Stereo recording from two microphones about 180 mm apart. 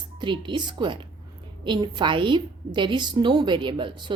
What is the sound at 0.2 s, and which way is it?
A woman's voice, 25° right (ahead or behind).